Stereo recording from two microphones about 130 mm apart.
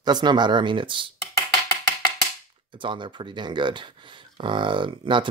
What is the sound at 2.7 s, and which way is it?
Speech, 40° right (ahead or behind).